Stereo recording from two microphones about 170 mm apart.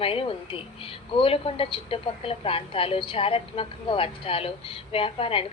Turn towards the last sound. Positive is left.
turn(degrees=35)  # may be behind; listen again after turning